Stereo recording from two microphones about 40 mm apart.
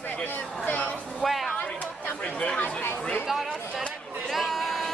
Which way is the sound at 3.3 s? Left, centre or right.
Centre.